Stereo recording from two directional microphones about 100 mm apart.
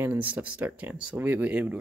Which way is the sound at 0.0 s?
20° right (ahead or behind).